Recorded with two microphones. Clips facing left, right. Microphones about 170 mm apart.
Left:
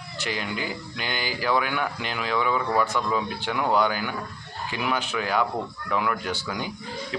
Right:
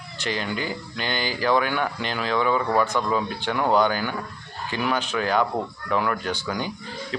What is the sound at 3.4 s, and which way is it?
Speech, 10° left (ahead or behind).